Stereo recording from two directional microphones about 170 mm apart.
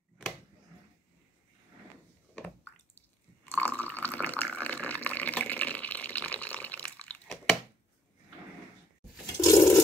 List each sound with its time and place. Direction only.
3.4 s water: 10° left (ahead or behind)
9.2 s toilet flush: 20° left (ahead or behind)